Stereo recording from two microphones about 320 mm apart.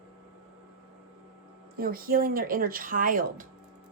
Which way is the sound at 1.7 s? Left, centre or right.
Right.